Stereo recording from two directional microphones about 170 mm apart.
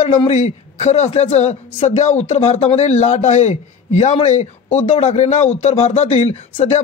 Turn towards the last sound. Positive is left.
turn(degrees=35)  # may be behind; listen again after turning